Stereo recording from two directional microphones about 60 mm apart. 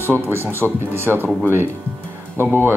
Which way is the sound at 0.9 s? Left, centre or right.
Right.